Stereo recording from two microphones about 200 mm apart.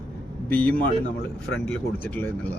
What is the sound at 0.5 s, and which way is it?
Speech, 10° left (ahead or behind).